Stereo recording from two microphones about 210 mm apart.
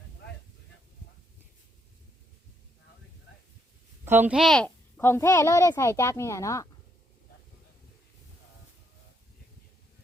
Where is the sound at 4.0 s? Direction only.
10° right (ahead or behind); by 6.6 s 15° left (ahead or behind).